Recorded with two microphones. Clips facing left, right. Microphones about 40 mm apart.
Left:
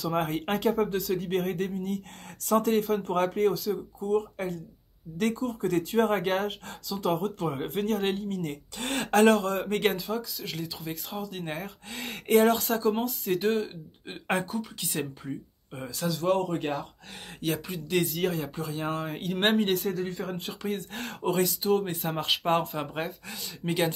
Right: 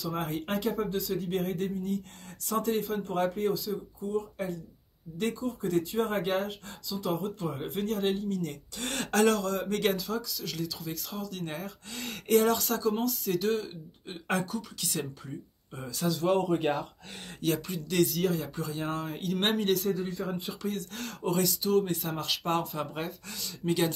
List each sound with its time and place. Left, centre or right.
0.0 s speech: left
7.5 s speech: left
9.9 s speech: left
15.9 s speech: centre
17.4 s speech: centre
20.6 s speech: left
22.7 s speech: centre